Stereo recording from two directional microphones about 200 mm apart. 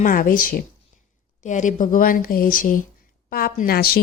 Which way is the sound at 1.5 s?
40° left (ahead or behind).